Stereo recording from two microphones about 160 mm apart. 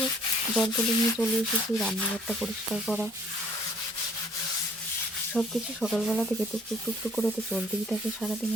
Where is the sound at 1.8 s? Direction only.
Centre (ahead or behind).